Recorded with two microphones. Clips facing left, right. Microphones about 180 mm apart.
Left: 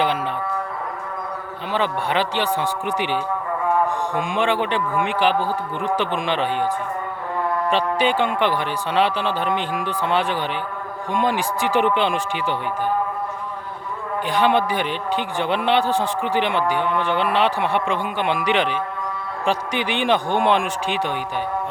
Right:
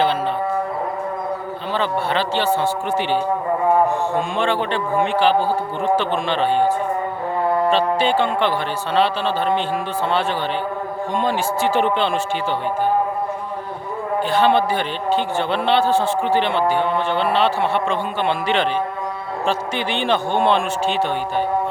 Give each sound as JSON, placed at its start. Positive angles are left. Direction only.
{"t": 1.7, "sound": "a man's voice", "side_deg": 15}
{"t": 3.6, "sound": "a sound", "side_deg": -30}
{"t": 4.1, "sound": "a man's voice", "side_deg": 15}
{"t": 7.7, "sound": "a man's voice", "side_deg": 15}
{"t": 14.3, "sound": "a man's voice", "side_deg": 15}